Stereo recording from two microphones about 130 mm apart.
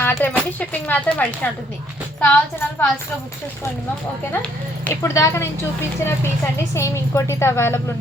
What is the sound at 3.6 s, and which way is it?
Speech, 25° left (ahead or behind).